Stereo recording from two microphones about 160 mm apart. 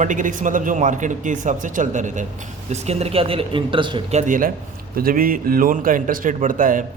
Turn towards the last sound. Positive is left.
turn(degrees=-55)  # may be behind; listen again after turning